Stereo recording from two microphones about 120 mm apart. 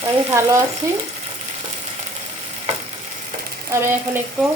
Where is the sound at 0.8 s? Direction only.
25° right (ahead or behind).